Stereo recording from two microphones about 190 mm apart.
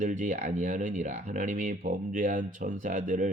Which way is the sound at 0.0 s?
40° right (ahead or behind).